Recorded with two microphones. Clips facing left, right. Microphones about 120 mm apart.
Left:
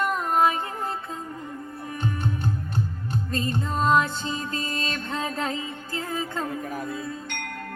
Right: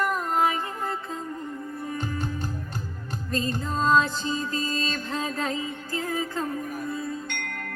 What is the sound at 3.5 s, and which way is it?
Music, 25° left (ahead or behind).